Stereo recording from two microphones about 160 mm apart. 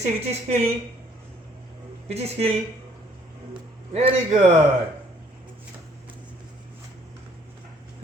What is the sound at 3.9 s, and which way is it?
Speech, 45° right (ahead or behind).